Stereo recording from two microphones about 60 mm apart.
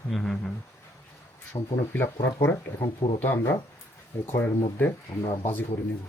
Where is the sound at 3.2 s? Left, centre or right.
Left.